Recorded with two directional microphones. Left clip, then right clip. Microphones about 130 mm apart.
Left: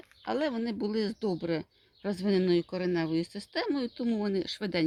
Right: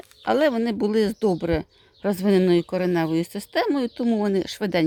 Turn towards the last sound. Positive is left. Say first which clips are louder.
# right 8 dB
turn(degrees=-50)  # may be behind; listen again after turning